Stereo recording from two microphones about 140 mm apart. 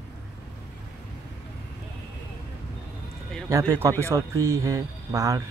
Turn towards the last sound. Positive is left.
turn(degrees=-25)  # may be behind; listen again after turning